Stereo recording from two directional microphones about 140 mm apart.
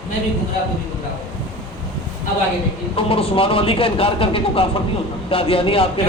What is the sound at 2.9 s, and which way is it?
Speech, 40° left (ahead or behind).